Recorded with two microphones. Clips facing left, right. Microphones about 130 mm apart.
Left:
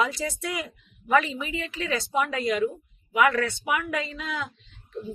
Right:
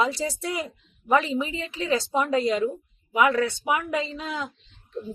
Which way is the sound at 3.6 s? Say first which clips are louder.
Right 2 dB; 25° right (ahead or behind).